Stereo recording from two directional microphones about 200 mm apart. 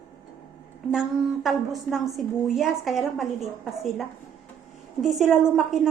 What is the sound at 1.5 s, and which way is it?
A woman's voice, centre (ahead or behind).